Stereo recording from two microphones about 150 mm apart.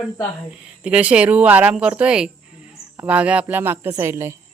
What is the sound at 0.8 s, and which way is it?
Speech, 10° right (ahead or behind).